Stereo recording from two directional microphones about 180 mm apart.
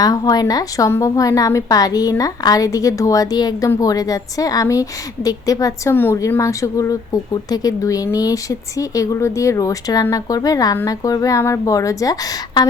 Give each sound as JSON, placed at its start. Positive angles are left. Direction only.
{"t": 0.0, "sound": "a woman's voice", "side_deg": 20}